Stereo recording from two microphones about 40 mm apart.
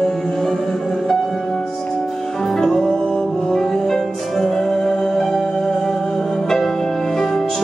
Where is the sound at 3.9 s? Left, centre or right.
Centre.